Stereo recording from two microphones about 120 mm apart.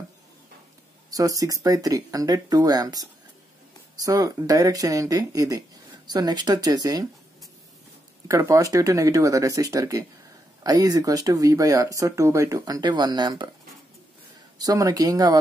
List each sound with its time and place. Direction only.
1.1 s speech: 30° right (ahead or behind)
8.3 s speech: 25° right (ahead or behind)
14.6 s speech: 30° right (ahead or behind)